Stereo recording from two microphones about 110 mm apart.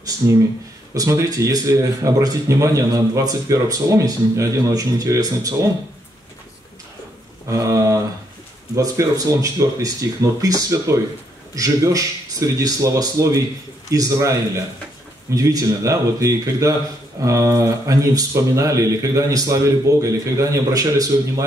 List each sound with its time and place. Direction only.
0.2 s speech: 30° right (ahead or behind)
7.4 s speech: 30° right (ahead or behind)
15.3 s speech: 30° right (ahead or behind)